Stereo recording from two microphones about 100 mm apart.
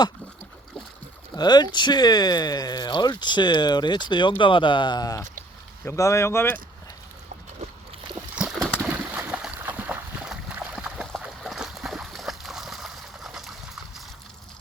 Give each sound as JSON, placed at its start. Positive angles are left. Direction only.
{"t": 1.4, "sound": "speech", "side_deg": 45}
{"t": 5.8, "sound": "speech", "side_deg": 30}
{"t": 8.4, "sound": "a sound", "side_deg": 0}
{"t": 8.9, "sound": "boat", "side_deg": -10}